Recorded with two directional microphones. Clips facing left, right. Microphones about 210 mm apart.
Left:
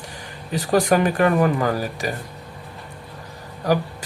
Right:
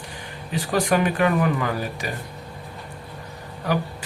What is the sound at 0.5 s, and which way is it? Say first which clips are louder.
Speech: left 3 dB; 40° left (ahead or behind).